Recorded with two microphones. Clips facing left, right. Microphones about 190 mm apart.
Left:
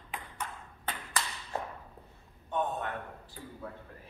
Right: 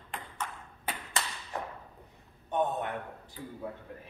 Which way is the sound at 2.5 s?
20° right (ahead or behind).